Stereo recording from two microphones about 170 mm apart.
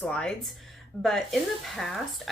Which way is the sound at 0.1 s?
5° left (ahead or behind).